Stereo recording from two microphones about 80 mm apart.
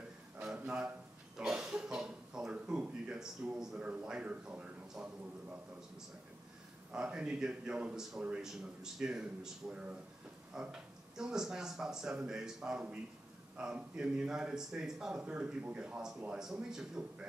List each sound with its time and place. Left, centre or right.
0.4 s cough: centre
3.8 s speech: centre
6.9 s speech: centre